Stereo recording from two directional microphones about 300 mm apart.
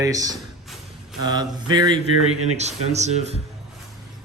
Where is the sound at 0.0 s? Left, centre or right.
Centre.